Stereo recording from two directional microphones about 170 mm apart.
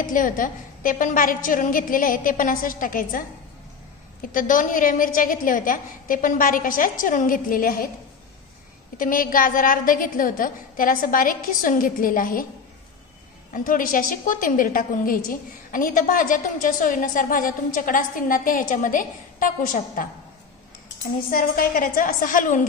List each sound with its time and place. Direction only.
0.0 s a woman's voice: 55° left (ahead or behind)
4.3 s a woman's voice: 50° left (ahead or behind)
8.9 s a woman's voice: 55° left (ahead or behind)
13.5 s a woman's voice: 55° left (ahead or behind)
21.3 s a woman's voice: 55° left (ahead or behind)